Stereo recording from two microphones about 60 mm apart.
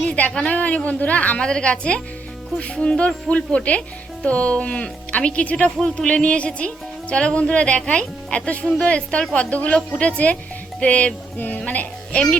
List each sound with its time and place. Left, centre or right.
0.0 s speech: centre
1.4 s speech: centre